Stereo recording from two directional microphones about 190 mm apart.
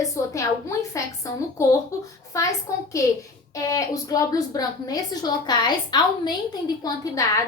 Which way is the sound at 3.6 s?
20° left (ahead or behind).